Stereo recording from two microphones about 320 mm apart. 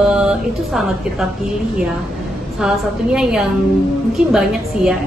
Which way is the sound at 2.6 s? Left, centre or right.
Centre.